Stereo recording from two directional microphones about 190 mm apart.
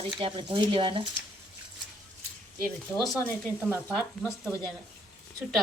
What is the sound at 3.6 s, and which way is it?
Dishes, 5° right (ahead or behind).